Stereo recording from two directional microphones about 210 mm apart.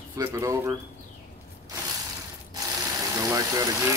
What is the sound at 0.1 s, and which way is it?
Speech, 15° right (ahead or behind).